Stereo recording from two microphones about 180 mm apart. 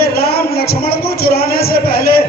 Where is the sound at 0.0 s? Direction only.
60° left (ahead or behind).